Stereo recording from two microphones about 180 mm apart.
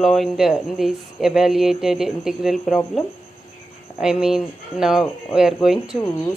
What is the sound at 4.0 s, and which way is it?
Speech, centre (ahead or behind).